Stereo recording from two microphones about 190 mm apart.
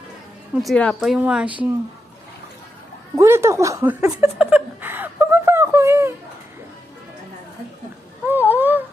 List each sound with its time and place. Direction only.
0.5 s a woman's voice: centre (ahead or behind)
3.2 s speech: 15° right (ahead or behind)
4.1 s chuckle: 5° right (ahead or behind)
8.3 s honk: 10° right (ahead or behind)